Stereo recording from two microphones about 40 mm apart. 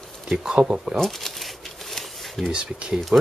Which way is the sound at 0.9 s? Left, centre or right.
Centre.